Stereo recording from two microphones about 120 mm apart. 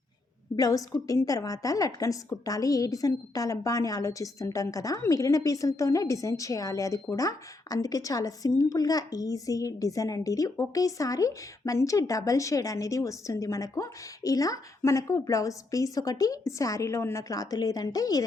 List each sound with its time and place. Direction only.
0.5 s a woman's voice: 30° left (ahead or behind)